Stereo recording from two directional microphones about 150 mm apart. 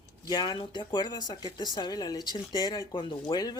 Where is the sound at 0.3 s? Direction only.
30° left (ahead or behind).